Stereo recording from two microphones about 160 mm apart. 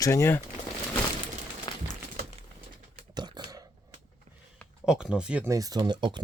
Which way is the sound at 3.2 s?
25° right (ahead or behind).